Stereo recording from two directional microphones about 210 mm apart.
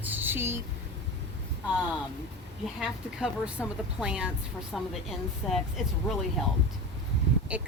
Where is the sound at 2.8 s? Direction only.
5° right (ahead or behind).